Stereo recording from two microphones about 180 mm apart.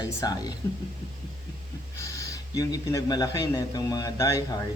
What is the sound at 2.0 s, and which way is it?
Speech, 15° left (ahead or behind).